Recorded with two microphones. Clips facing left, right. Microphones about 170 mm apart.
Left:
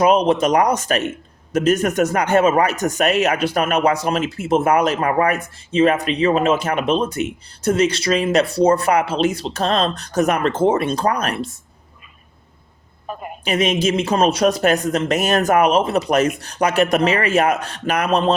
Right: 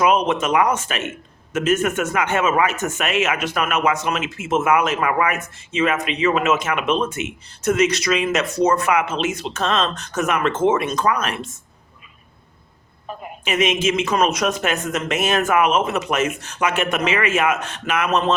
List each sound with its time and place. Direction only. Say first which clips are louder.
0.0 s speech: left 3 dB; 35° left (ahead or behind)
13.4 s speech: left 1 dB; 35° left (ahead or behind)